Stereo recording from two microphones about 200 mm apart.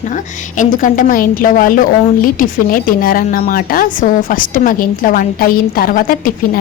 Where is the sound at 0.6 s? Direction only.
40° left (ahead or behind).